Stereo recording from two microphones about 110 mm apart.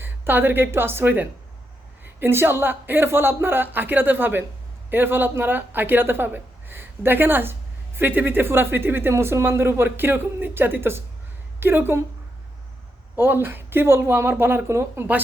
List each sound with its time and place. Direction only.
0.0 s a woman's voice: 20° right (ahead or behind)
13.1 s speech: 20° right (ahead or behind)